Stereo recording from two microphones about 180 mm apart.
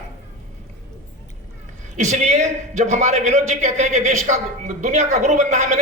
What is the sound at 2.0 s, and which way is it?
A man's voice, 40° right (ahead or behind).